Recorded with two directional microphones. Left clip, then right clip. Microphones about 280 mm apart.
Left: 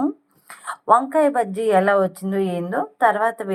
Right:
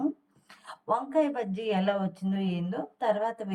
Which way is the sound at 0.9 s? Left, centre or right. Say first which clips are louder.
Left 11 dB; left.